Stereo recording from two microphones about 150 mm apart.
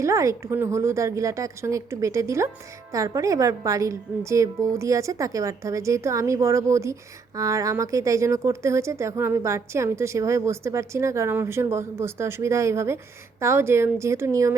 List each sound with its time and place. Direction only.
0.0 s speech: 20° right (ahead or behind)